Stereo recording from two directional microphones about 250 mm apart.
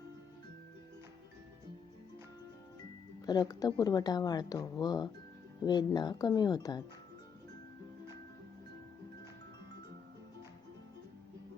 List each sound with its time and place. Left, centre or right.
3.2 s speech: centre